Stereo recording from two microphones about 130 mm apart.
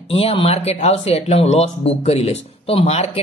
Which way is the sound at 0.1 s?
50° left (ahead or behind).